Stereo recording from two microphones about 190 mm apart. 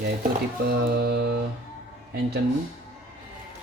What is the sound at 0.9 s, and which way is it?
Speech, 60° right (ahead or behind).